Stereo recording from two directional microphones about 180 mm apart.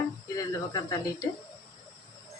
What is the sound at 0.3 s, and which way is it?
Speech, 20° left (ahead or behind).